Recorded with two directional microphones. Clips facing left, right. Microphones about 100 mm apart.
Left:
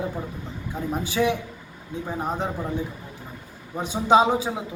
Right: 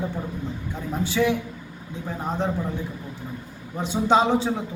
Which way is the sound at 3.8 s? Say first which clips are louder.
Left 1 dB; 10° left (ahead or behind).